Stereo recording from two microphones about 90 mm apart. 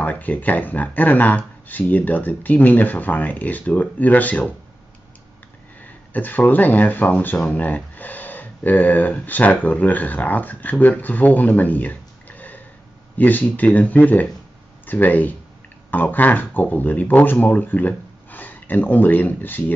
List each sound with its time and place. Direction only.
0.0 s speech: 15° left (ahead or behind)
6.1 s speech: 20° left (ahead or behind)